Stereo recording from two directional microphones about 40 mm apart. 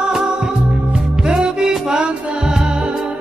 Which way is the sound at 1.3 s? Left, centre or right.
Centre.